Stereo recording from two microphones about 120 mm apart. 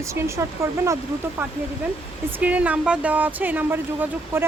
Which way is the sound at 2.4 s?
15° right (ahead or behind).